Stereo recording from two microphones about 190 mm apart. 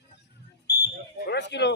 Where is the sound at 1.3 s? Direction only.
65° left (ahead or behind).